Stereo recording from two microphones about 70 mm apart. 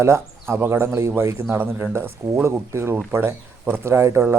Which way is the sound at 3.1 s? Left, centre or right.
Right.